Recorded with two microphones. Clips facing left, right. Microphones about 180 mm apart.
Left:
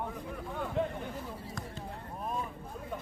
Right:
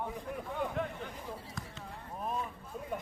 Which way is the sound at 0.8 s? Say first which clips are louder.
Left 7 dB; 30° left (ahead or behind).